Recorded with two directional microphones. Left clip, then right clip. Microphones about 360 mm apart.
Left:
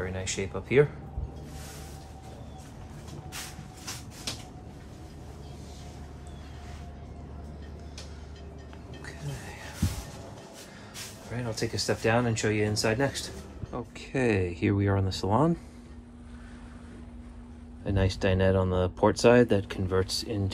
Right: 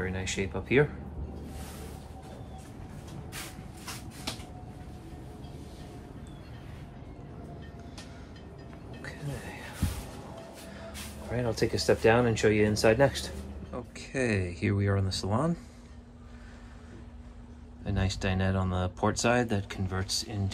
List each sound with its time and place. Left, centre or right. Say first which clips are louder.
0.0 s speech: even; centre
11.2 s speech: right 4 dB; centre
17.8 s speech: left 5 dB; centre